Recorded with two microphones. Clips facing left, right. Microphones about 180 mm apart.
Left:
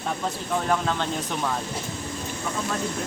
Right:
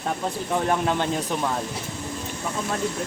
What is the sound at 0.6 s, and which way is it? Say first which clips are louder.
Speech: right 2 dB; 20° right (ahead or behind).